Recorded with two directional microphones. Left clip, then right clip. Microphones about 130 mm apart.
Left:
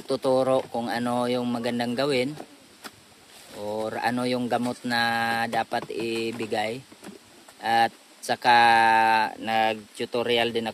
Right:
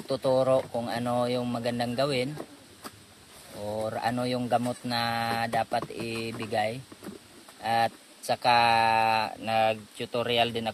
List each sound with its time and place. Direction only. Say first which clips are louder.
0.1 s speech: left 2 dB; 80° left
3.6 s speech: left 3 dB; 80° left